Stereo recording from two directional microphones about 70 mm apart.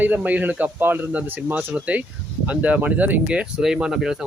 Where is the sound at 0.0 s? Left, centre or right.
Right.